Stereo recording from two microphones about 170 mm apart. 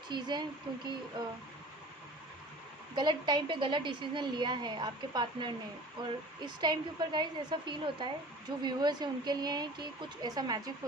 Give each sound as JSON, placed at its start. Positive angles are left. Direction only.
{"t": 0.1, "sound": "a woman's voice", "side_deg": -25}
{"t": 2.9, "sound": "a woman's voice", "side_deg": -25}